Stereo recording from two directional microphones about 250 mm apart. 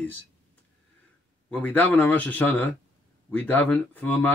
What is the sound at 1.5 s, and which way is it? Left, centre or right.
Speech, centre.